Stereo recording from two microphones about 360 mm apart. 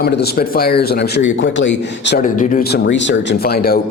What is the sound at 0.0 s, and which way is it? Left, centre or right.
Speech, left.